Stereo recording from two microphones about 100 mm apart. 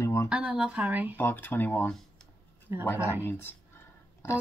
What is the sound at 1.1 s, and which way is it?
Speech, 20° left (ahead or behind).